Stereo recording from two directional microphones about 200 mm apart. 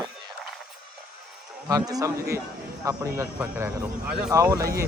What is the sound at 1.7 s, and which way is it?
Speech, 20° right (ahead or behind).